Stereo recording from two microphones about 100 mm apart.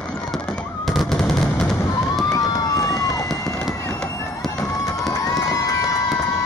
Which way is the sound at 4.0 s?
10° left (ahead or behind).